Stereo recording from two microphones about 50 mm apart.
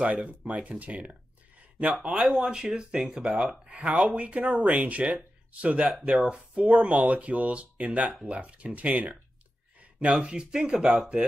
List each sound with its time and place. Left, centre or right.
0.0 s speech: right
2.0 s speech: centre
3.8 s speech: right
9.9 s speech: centre